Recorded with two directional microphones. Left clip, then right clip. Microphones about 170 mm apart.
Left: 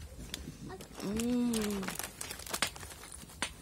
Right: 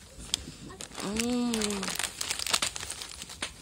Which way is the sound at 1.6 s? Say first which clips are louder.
Right 6 dB; 35° right (ahead or behind).